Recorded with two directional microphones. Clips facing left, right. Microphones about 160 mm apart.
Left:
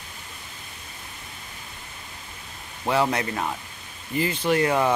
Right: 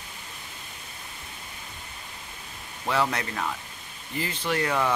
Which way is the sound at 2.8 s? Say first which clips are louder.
Left 4 dB; 25° left (ahead or behind).